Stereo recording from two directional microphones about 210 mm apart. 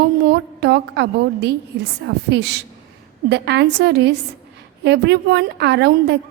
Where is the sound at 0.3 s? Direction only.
50° right (ahead or behind).